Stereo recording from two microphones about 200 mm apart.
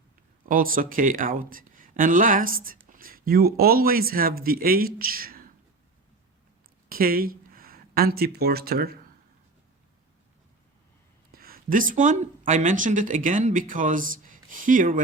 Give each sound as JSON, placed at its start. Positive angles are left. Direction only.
{"t": 0.4, "sound": "a man's voice", "side_deg": -45}
{"t": 6.8, "sound": "speech", "side_deg": -45}
{"t": 11.3, "sound": "speech", "side_deg": -45}